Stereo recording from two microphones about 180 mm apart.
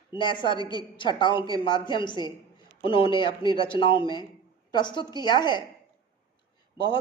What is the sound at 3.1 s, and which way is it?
A woman's voice, 25° left (ahead or behind).